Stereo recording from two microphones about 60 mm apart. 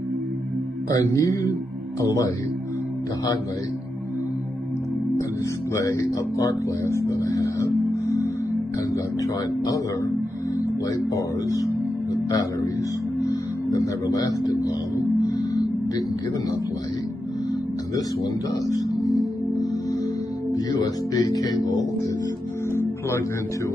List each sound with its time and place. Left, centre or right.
0.8 s speech: left
2.0 s speech: left
5.8 s speech: left
6.9 s speech: left
7.9 s music: left
8.9 s speech: left
10.6 s speech: left
13.2 s speech: left
15.2 s music: left
17.9 s speech: left
20.5 s speech: left
22.8 s music: left